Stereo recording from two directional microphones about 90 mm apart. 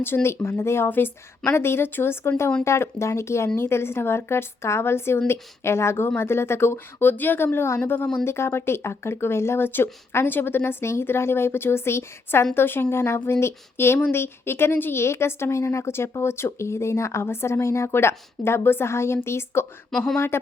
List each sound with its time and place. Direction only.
0.0 s speech: 25° left (ahead or behind)
7.9 s speech: 15° left (ahead or behind)
8.2 s speech: 30° left (ahead or behind)